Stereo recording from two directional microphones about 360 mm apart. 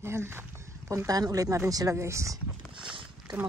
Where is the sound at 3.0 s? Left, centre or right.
Centre.